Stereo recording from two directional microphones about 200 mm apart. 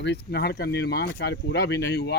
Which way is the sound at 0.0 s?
60° left (ahead or behind).